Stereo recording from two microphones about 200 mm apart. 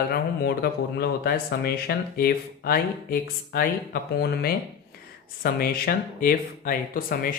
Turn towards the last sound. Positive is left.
turn(degrees=45)  # may be behind; listen again after turning